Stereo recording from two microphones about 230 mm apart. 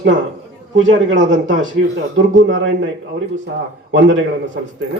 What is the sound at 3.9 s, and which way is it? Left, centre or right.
Speech, right.